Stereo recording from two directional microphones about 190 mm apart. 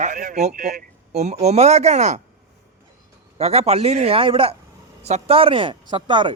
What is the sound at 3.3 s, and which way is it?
A man's voice, 35° right (ahead or behind).